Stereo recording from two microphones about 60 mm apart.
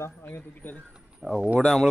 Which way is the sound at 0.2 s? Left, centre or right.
Left.